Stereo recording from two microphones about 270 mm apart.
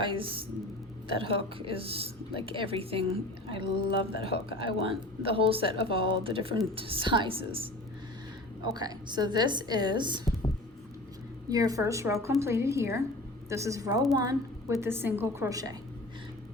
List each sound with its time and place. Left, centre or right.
0.0 s speech: centre
3.6 s speech: left
5.2 s speech: right
8.7 s a woman's voice: centre
11.4 s a woman's voice: centre